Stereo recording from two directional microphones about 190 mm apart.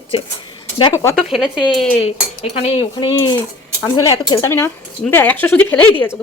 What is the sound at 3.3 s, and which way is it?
A man's voice, 15° left (ahead or behind).